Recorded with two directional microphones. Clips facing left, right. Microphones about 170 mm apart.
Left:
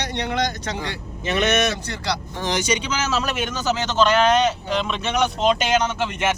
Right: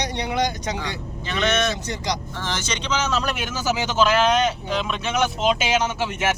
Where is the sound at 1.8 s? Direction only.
15° right (ahead or behind).